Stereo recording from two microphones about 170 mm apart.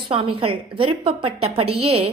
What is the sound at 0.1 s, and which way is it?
A woman's voice, 30° right (ahead or behind).